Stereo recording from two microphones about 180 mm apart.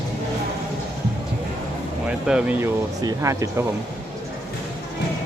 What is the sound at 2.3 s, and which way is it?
Speech, 5° right (ahead or behind).